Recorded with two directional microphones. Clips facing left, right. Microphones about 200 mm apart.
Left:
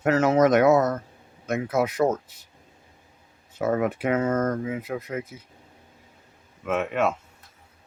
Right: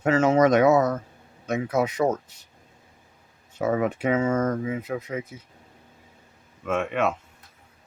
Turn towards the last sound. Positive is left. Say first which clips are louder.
# even
turn(degrees=5)  # may be behind; listen again after turning